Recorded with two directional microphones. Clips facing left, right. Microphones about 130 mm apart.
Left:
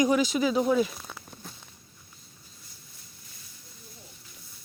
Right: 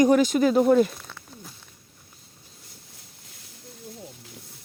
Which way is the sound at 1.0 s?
15° left (ahead or behind).